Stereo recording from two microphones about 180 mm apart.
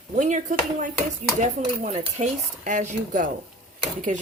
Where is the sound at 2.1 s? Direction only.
45° right (ahead or behind).